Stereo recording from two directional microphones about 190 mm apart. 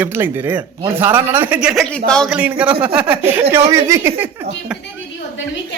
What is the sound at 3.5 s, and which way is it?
Speech, 15° right (ahead or behind).